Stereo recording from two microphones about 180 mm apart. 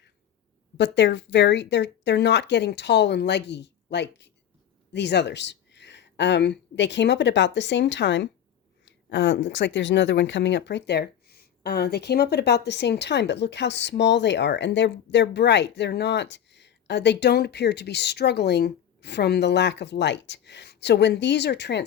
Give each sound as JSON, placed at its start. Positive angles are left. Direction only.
{"t": 0.8, "sound": "speech", "side_deg": 75}